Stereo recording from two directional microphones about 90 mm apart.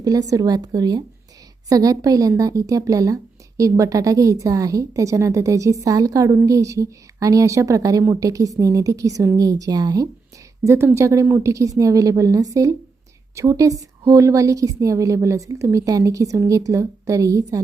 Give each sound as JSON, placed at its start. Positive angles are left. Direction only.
{"t": 0.0, "sound": "a woman's voice", "side_deg": -40}